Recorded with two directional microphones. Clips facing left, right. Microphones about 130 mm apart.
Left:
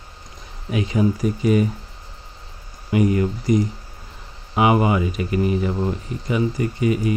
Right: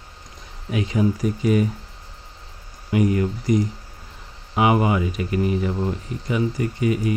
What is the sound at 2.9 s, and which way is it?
Speech, 20° left (ahead or behind).